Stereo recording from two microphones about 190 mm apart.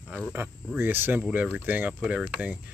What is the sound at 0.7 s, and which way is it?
Speech, 10° right (ahead or behind).